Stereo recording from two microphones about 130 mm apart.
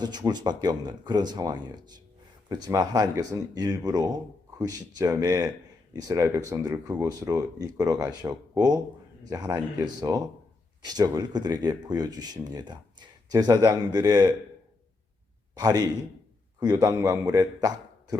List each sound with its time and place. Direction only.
0.0 s speech: 35° right (ahead or behind)
15.5 s speech: 30° right (ahead or behind)